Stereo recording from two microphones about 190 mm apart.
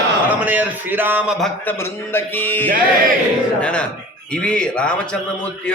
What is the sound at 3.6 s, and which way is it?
A man's voice, 5° left (ahead or behind).